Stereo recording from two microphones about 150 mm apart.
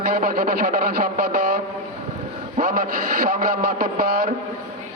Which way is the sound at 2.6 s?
60° right (ahead or behind).